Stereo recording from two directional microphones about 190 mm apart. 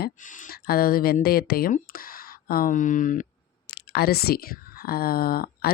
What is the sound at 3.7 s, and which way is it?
Speech, 60° left (ahead or behind).